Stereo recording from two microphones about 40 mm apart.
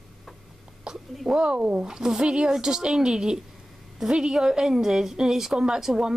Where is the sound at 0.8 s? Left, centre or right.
Centre.